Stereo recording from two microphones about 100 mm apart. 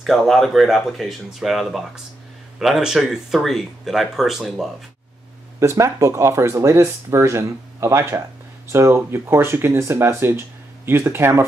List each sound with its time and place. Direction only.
0.0 s speech: centre (ahead or behind)
5.6 s speech: 30° right (ahead or behind)